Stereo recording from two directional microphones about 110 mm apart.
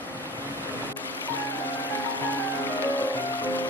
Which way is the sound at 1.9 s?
15° left (ahead or behind).